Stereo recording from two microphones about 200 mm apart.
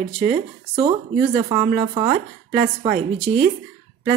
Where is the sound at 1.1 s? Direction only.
45° right (ahead or behind).